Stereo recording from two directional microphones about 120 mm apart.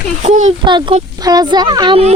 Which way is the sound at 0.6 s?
40° right (ahead or behind).